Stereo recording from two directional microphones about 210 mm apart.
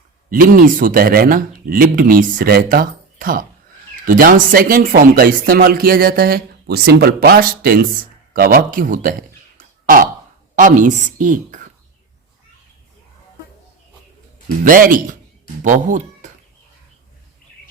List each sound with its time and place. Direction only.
0.3 s speech: 45° right (ahead or behind)
9.6 s a sound: 40° right (ahead or behind)
10.5 s a woman's voice: 40° right (ahead or behind)
14.6 s speech: 40° right (ahead or behind)